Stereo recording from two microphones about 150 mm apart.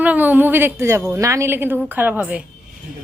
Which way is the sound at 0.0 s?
10° right (ahead or behind).